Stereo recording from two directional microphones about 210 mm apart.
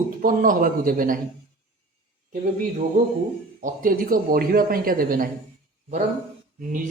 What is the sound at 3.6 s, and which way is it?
Speech, 40° right (ahead or behind).